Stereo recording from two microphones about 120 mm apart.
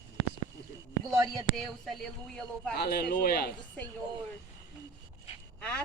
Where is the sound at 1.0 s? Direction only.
30° right (ahead or behind).